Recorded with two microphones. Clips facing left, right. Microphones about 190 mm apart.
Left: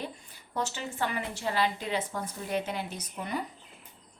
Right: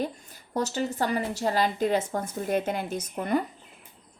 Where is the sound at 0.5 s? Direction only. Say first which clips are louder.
Right 6 dB; 40° right (ahead or behind).